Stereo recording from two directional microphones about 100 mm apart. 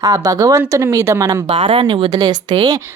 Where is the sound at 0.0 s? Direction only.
35° right (ahead or behind).